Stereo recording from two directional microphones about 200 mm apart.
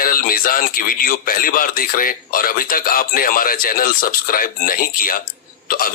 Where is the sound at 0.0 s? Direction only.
45° left (ahead or behind).